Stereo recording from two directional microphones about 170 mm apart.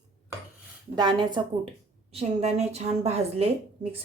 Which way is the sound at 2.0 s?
40° right (ahead or behind).